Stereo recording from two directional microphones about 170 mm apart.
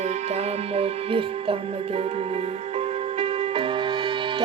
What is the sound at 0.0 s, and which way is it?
Music, 40° right (ahead or behind).